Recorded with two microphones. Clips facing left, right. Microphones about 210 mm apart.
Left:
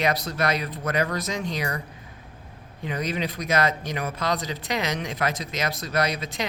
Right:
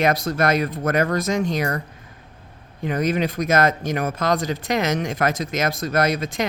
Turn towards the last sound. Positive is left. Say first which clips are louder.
# right 5 dB
turn(degrees=-50)  # may be behind; listen again after turning